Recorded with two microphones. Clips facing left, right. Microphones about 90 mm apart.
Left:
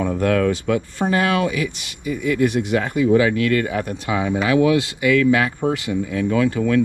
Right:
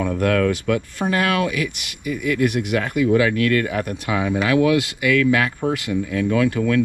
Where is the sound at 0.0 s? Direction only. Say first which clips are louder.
Left 1 dB; 25° left (ahead or behind).